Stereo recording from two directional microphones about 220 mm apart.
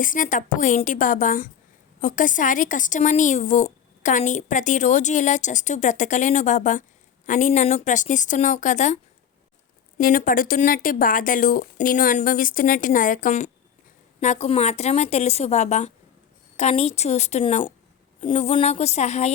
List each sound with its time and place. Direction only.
0.0 s speech: 35° left (ahead or behind)
10.0 s a woman's voice: 40° left (ahead or behind)